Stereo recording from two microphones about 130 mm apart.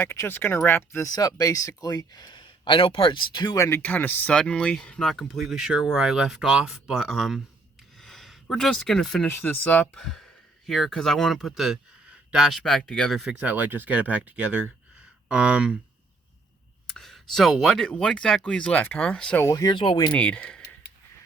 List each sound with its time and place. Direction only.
0.0 s speech: 20° left (ahead or behind); by 3.6 s 35° left (ahead or behind)
3.6 s speech: 15° left (ahead or behind)
7.9 s a sound: centre (ahead or behind)
9.2 s speech: 15° left (ahead or behind)
10.7 s speech: centre (ahead or behind)
16.8 s speech: 5° left (ahead or behind)
19.4 s speech: 25° left (ahead or behind)
20.1 s speech: 10° left (ahead or behind)